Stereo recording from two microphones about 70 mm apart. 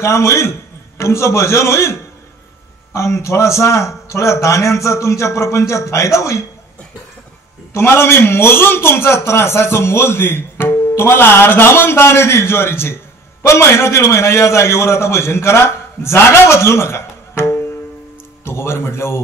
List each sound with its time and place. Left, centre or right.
0.0 s a man's voice: left
7.7 s a man's voice: left